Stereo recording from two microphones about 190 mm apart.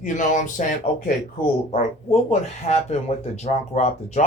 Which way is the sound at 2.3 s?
35° left (ahead or behind).